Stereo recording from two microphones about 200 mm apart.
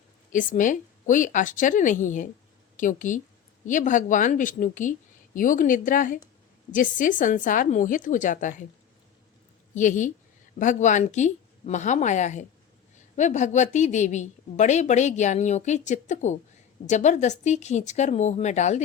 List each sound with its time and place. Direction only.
0.3 s a woman's voice: 40° left (ahead or behind)
9.7 s a woman's voice: 40° left (ahead or behind)